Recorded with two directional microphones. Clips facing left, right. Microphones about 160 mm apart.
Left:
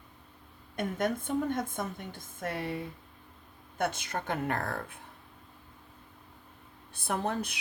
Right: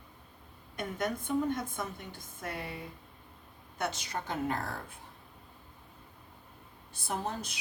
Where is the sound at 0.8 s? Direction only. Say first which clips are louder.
Left 4 dB; 50° left (ahead or behind).